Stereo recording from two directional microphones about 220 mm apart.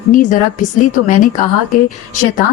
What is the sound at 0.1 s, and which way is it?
A woman's voice, 35° left (ahead or behind).